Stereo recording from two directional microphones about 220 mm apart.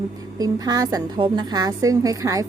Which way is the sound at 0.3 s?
15° right (ahead or behind).